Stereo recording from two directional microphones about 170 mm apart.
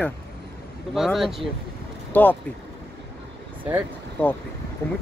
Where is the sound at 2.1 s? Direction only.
10° left (ahead or behind).